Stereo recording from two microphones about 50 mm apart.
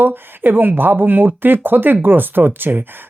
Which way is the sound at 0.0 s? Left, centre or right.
Right.